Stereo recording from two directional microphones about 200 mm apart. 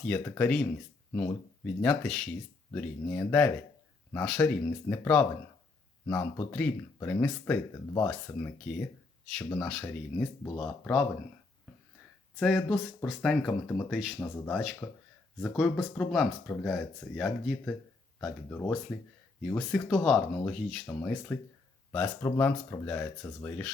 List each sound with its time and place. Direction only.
0.0 s speech: 5° left (ahead or behind)
12.4 s speech: centre (ahead or behind)